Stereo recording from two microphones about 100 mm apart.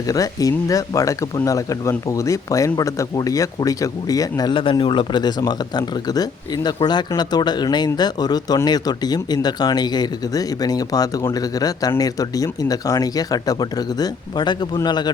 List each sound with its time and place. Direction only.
0.1 s speech: 35° left (ahead or behind)
4.5 s speech: 60° left (ahead or behind)